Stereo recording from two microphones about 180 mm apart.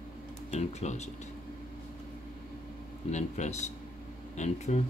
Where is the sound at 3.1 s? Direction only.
40° left (ahead or behind).